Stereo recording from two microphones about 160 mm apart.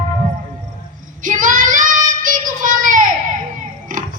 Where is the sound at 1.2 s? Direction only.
55° right (ahead or behind).